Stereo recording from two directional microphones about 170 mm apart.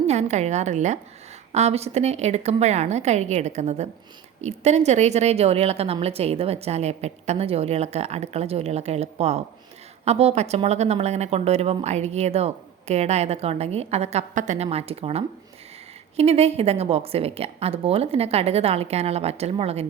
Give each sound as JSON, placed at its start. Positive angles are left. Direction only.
{"t": 0.1, "sound": "a woman's voice", "side_deg": -40}